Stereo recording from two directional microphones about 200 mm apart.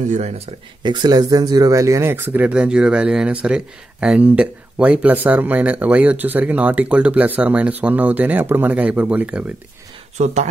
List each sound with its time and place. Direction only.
0.0 s speech: 35° right (ahead or behind)
0.8 s speech: 20° right (ahead or behind)
10.1 s speech: 35° right (ahead or behind)